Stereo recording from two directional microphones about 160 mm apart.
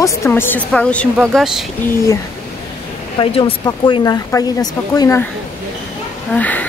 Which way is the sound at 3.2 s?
35° left (ahead or behind).